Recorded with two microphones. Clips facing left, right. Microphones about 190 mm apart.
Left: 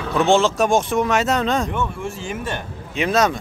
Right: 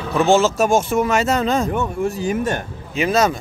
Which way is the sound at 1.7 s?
40° right (ahead or behind).